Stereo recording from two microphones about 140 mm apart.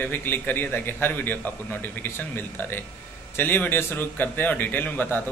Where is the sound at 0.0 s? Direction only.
15° left (ahead or behind).